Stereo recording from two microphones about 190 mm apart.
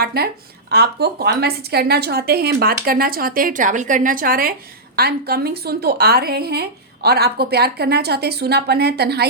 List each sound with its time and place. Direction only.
0.0 s a woman's voice: 55° right (ahead or behind)